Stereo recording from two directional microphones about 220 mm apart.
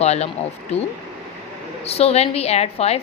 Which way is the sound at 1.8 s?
25° left (ahead or behind).